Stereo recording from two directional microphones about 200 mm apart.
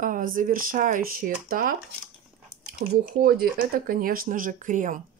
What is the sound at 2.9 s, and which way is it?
Speech, 50° right (ahead or behind).